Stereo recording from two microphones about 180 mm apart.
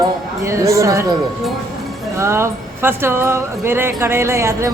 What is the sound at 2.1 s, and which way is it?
Speech, 15° right (ahead or behind).